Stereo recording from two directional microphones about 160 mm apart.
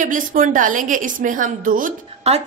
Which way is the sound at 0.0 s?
55° right (ahead or behind).